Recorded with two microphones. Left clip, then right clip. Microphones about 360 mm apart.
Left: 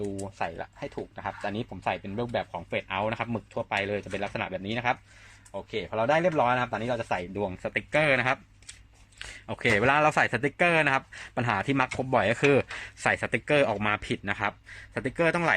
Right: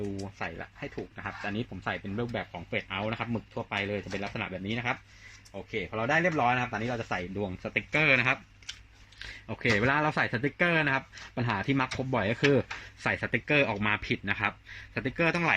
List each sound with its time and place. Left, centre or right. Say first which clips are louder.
0.2 s speech: left 4 dB; left
9.5 s speech: left 3 dB; left